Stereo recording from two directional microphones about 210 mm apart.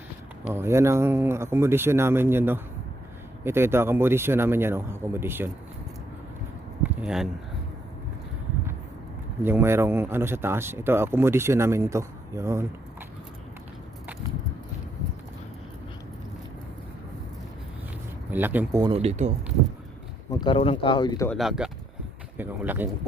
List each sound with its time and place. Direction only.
0.4 s speech: 10° right (ahead or behind)
7.0 s speech: 5° right (ahead or behind)
9.4 s speech: 10° right (ahead or behind)
18.3 s speech: 10° right (ahead or behind); by 19.3 s 30° right (ahead or behind)
20.3 s speech: 20° left (ahead or behind)
21.2 s speech: centre (ahead or behind)